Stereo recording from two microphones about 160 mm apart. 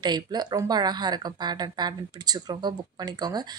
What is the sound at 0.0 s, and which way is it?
Speech, 25° right (ahead or behind).